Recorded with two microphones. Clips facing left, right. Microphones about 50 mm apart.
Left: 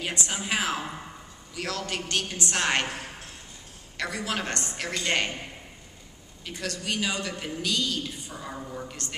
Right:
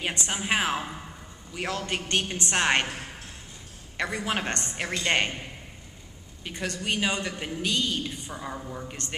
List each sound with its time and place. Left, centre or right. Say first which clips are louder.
0.0 s a woman's voice: right 1 dB; right
3.9 s a woman's voice: right 2 dB; right
6.4 s a woman's voice: right 2 dB; right
8.5 s speech: even; centre